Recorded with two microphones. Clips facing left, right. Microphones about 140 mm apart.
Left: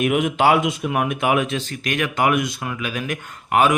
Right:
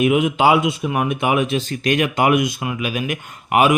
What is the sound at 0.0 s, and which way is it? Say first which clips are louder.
Speech: right 2 dB; 5° right (ahead or behind).